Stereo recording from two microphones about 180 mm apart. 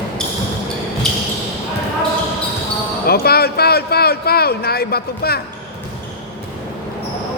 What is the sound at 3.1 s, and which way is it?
Speech, 60° left (ahead or behind).